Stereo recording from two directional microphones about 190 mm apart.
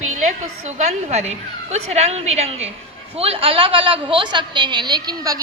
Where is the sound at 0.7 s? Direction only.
35° right (ahead or behind).